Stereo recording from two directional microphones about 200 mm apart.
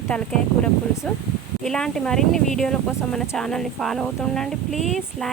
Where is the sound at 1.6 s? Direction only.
Centre (ahead or behind).